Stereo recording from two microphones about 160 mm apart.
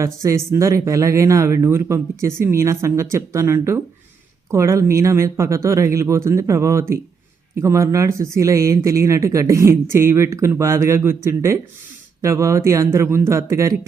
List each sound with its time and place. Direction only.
0.0 s speech: 20° right (ahead or behind)